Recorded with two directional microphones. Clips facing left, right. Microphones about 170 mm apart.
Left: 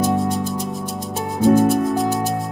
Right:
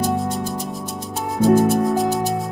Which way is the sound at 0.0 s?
Centre (ahead or behind).